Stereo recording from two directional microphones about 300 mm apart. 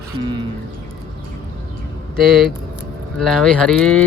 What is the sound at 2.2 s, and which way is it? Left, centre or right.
Speech, centre.